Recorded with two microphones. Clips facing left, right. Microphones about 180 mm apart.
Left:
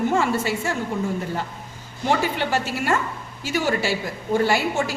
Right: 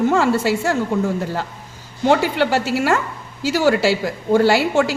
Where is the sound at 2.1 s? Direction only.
85° right.